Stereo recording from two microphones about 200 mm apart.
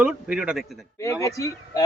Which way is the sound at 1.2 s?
15° left (ahead or behind).